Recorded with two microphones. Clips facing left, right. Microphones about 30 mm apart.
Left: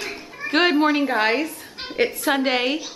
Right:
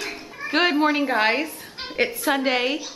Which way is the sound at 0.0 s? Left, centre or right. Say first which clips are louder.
Left 1 dB; centre.